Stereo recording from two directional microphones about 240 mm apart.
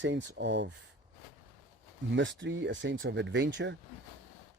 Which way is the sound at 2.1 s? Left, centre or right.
Right.